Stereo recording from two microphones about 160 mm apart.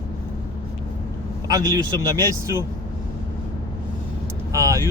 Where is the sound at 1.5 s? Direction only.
25° right (ahead or behind).